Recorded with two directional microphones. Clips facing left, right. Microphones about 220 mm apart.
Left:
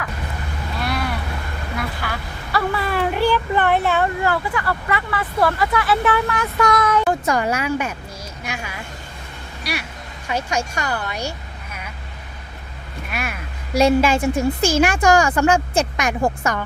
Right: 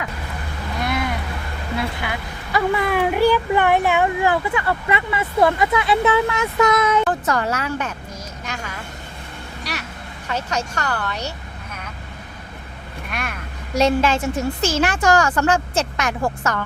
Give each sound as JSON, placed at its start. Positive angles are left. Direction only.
{"t": 0.8, "sound": "boat", "side_deg": -20}
{"t": 1.8, "sound": "speech", "side_deg": -20}
{"t": 7.0, "sound": "a woman's voice", "side_deg": 15}
{"t": 13.1, "sound": "vehicle", "side_deg": 5}
{"t": 13.7, "sound": "a woman's voice", "side_deg": 10}